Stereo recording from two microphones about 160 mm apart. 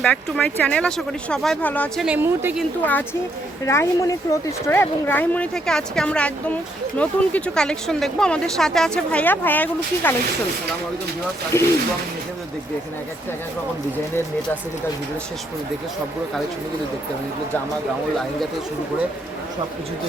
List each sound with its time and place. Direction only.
0.0 s speech: 5° left (ahead or behind)
2.0 s speech: 10° right (ahead or behind)
3.7 s speech: 15° left (ahead or behind)
11.5 s speech: 15° left (ahead or behind)